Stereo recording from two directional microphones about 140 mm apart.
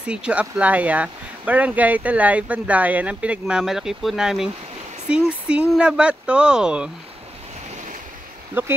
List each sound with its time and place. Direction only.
0.0 s speech: 5° right (ahead or behind)
8.6 s speech: 15° right (ahead or behind)